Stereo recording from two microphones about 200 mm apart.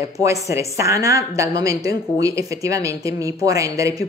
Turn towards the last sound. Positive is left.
turn(degrees=-15)  # may be behind; listen again after turning